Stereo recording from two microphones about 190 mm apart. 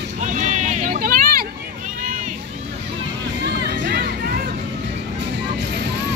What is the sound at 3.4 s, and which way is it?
Music, 55° right (ahead or behind).